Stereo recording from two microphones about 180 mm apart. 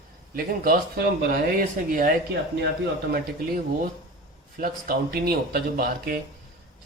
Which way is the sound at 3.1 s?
55° right (ahead or behind).